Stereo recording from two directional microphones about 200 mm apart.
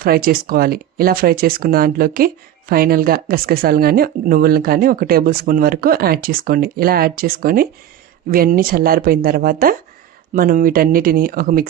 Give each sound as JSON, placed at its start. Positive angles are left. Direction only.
{"t": 0.0, "sound": "speech", "side_deg": -45}